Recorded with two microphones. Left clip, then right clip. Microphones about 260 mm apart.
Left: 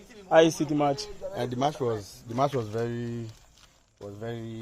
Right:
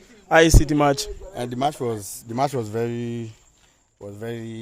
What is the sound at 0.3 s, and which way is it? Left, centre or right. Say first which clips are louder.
Speech: right 4 dB; right.